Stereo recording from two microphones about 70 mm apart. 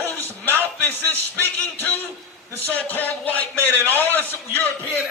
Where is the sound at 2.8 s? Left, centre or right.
Left.